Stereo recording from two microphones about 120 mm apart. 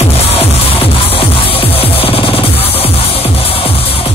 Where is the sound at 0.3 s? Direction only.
50° left (ahead or behind).